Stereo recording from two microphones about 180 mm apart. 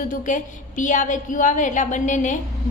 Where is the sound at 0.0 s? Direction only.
45° left (ahead or behind).